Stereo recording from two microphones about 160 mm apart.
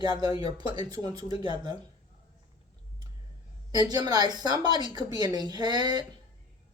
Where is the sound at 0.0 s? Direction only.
25° right (ahead or behind).